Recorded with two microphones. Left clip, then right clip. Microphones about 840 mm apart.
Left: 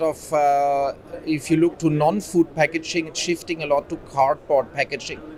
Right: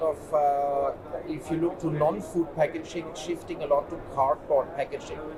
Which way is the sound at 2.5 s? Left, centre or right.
Left.